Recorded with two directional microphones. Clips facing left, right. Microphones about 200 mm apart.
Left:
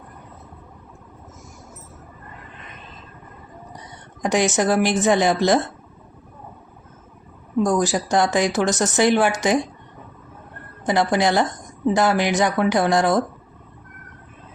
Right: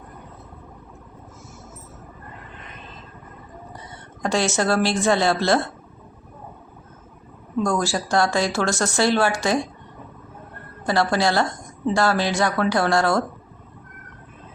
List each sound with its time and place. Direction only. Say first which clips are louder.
4.2 s speech: left 2 dB; 15° left (ahead or behind)
7.6 s speech: left 3 dB; 20° left (ahead or behind)
10.8 s speech: left 1 dB; 20° left (ahead or behind)